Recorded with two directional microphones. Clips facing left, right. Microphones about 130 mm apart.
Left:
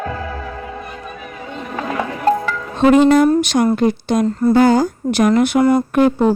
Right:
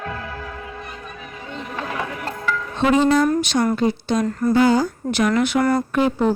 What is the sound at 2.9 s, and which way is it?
Speech, 55° left (ahead or behind).